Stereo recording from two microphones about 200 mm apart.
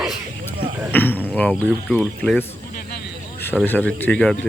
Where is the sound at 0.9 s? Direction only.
10° left (ahead or behind).